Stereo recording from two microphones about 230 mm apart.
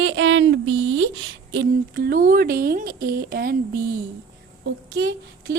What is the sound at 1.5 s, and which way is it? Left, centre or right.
Speech, right.